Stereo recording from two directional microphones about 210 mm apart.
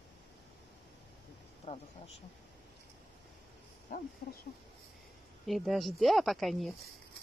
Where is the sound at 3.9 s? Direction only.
40° left (ahead or behind).